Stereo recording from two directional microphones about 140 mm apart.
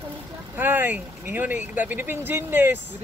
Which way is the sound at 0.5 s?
15° right (ahead or behind).